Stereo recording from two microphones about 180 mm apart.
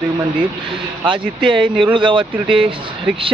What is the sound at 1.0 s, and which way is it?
Speech, 25° right (ahead or behind).